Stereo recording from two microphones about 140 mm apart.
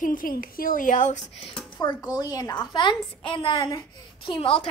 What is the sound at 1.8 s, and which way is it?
A woman's voice, 30° left (ahead or behind).